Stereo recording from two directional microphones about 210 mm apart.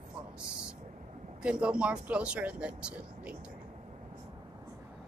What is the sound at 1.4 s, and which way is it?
Speech, 5° right (ahead or behind).